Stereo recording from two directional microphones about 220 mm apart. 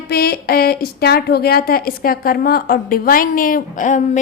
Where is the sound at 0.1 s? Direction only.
45° left (ahead or behind).